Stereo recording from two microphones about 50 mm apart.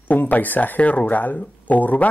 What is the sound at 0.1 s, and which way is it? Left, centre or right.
Speech, left.